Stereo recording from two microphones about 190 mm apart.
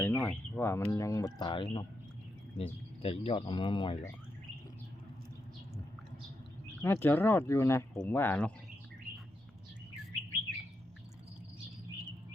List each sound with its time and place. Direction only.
0.0 s speech: 10° left (ahead or behind); by 3.9 s 25° left (ahead or behind)
6.8 s speech: 10° left (ahead or behind)